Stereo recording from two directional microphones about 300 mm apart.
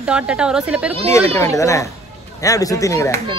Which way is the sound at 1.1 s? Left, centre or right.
Centre.